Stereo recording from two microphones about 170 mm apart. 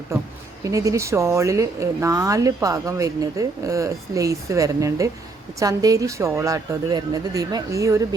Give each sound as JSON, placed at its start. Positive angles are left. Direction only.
{"t": 0.6, "sound": "a woman's voice", "side_deg": -20}